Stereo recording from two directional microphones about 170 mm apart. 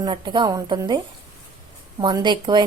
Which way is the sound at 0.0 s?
25° right (ahead or behind).